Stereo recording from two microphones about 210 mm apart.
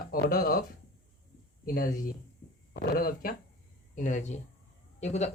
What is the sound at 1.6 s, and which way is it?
Speech, 45° left (ahead or behind).